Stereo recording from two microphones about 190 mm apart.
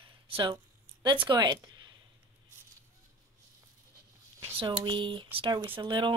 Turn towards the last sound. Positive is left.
turn(degrees=-25)  # may be behind; listen again after turning